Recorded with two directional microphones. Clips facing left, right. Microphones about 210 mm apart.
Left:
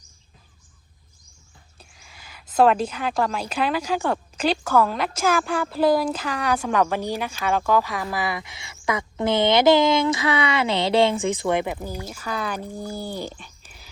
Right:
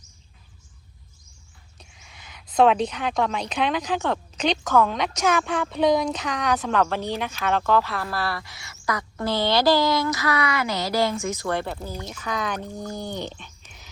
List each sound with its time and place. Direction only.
1.8 s a woman's voice: centre (ahead or behind); by 11.3 s 30° left (ahead or behind)
11.4 s speech: 15° left (ahead or behind)